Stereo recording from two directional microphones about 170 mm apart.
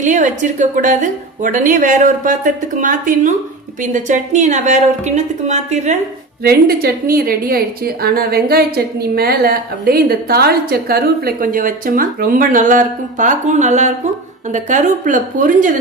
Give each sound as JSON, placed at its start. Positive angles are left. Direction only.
{"t": 0.0, "sound": "a woman's voice", "side_deg": -50}
{"t": 6.4, "sound": "a woman's voice", "side_deg": -65}